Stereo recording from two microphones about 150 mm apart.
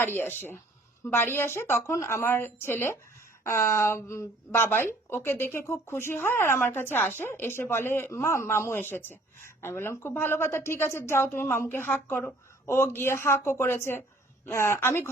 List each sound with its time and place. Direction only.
0.0 s speech: 15° left (ahead or behind)